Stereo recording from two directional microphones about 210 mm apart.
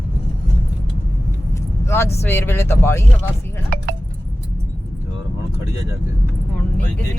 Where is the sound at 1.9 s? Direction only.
10° left (ahead or behind).